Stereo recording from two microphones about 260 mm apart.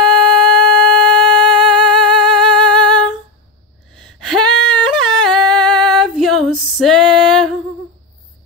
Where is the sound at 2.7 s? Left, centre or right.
Centre.